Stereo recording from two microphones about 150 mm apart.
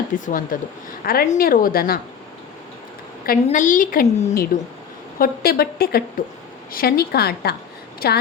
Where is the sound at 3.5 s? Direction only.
60° left (ahead or behind).